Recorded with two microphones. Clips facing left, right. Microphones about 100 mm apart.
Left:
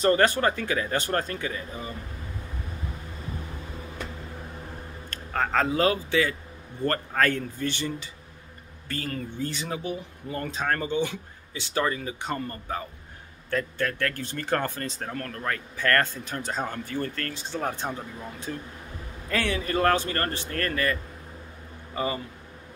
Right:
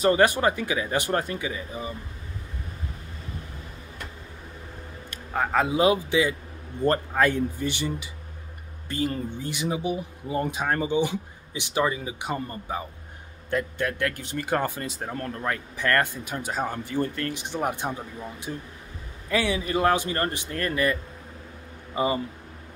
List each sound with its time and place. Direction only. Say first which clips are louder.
0.0 s speech: right 1 dB; 15° right (ahead or behind)
5.1 s speech: right 1 dB; 10° right (ahead or behind)